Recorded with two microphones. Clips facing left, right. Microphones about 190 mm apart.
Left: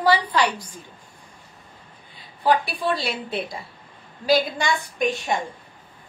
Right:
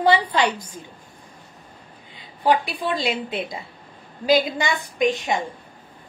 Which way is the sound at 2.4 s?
15° right (ahead or behind).